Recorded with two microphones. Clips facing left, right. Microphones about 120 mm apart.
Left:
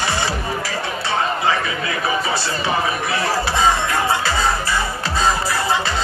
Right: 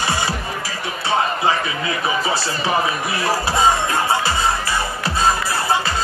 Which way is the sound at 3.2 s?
15° right (ahead or behind).